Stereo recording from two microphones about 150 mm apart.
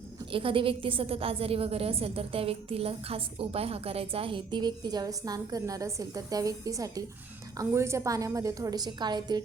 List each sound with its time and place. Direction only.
0.3 s a woman's voice: 35° right (ahead or behind)